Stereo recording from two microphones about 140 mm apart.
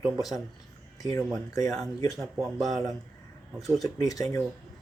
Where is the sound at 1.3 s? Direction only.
25° left (ahead or behind).